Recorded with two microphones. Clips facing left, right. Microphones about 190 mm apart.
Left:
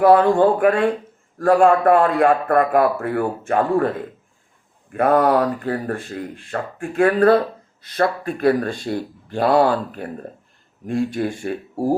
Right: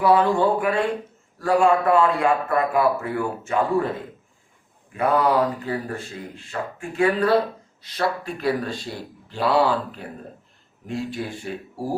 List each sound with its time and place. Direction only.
0.0 s a man's voice: 50° left (ahead or behind)
4.9 s a man's voice: 55° left (ahead or behind)